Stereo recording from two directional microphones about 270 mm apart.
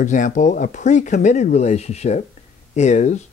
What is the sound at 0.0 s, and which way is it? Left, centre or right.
Speech, left.